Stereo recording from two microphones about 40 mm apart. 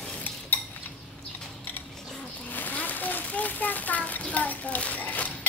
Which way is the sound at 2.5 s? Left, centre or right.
Left.